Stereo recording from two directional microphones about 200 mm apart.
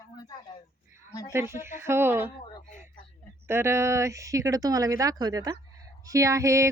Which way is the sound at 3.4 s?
15° right (ahead or behind).